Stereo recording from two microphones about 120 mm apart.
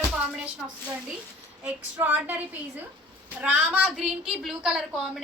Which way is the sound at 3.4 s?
15° right (ahead or behind).